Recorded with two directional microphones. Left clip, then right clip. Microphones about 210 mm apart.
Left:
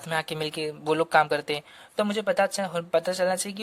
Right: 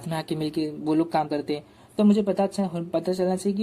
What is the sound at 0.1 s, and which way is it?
Speech, 35° left (ahead or behind).